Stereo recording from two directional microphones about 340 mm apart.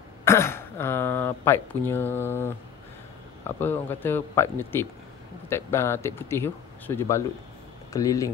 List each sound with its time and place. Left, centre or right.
0.2 s speech: centre